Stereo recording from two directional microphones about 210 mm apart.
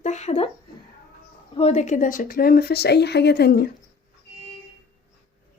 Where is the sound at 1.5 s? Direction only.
30° left (ahead or behind); by 3.6 s 50° left (ahead or behind).